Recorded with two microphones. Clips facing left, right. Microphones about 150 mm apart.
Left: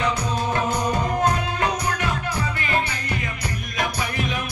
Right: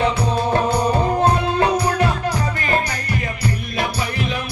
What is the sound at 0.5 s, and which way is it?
Music, 30° right (ahead or behind).